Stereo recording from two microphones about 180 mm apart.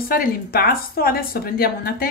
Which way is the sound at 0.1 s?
55° left (ahead or behind).